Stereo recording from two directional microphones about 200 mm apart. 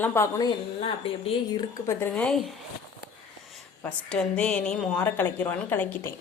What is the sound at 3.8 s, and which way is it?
A woman's voice, 5° left (ahead or behind).